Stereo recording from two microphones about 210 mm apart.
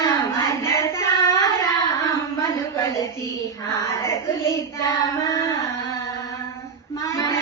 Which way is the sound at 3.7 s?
15° left (ahead or behind).